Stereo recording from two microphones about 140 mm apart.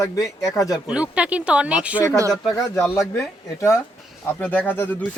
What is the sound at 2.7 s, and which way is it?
A man's voice, 20° left (ahead or behind).